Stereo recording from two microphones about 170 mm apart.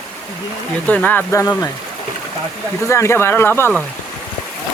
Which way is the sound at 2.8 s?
15° left (ahead or behind).